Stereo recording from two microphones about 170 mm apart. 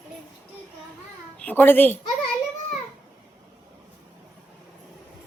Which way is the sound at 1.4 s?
10° left (ahead or behind).